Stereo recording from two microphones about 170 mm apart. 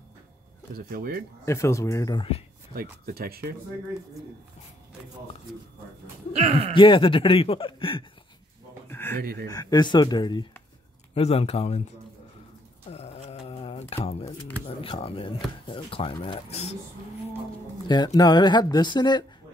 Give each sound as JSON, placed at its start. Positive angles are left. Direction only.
{"t": 0.7, "sound": "speech", "side_deg": -60}
{"t": 1.4, "sound": "speech", "side_deg": 15}
{"t": 2.7, "sound": "speech", "side_deg": -60}
{"t": 6.3, "sound": "speech", "side_deg": -40}
{"t": 6.7, "sound": "speech", "side_deg": 30}
{"t": 8.8, "sound": "a sound", "side_deg": 15}
{"t": 9.2, "sound": "speech", "side_deg": -60}
{"t": 9.5, "sound": "speech", "side_deg": 25}
{"t": 11.1, "sound": "speech", "side_deg": 35}
{"t": 12.9, "sound": "a sound", "side_deg": 35}
{"t": 14.8, "sound": "speech", "side_deg": 35}
{"t": 17.8, "sound": "speech", "side_deg": 25}